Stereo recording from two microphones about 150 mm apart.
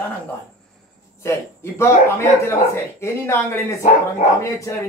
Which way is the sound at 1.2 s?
15° left (ahead or behind).